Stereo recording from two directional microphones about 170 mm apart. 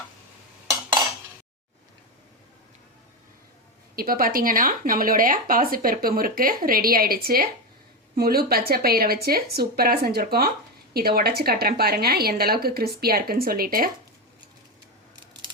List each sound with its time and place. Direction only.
3.9 s speech: 60° right (ahead or behind)